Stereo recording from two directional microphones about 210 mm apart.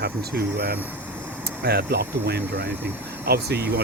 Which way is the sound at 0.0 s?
50° right (ahead or behind).